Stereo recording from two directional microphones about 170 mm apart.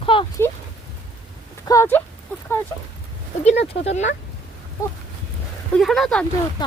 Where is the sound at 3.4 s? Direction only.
40° left (ahead or behind).